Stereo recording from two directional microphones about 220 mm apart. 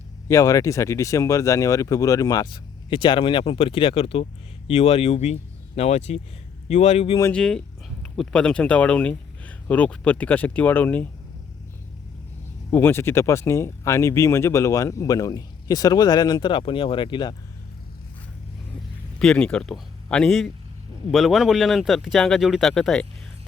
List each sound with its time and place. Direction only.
0.3 s speech: 15° left (ahead or behind)
7.2 s speech: 5° left (ahead or behind)
12.7 s speech: 10° left (ahead or behind)
19.2 s speech: 5° left (ahead or behind)